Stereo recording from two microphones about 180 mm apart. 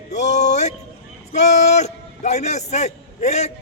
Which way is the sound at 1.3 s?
40° left (ahead or behind).